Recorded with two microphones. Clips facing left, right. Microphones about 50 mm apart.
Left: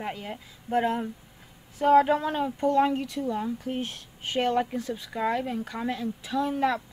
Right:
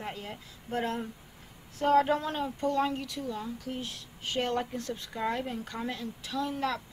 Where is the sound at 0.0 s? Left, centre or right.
Left.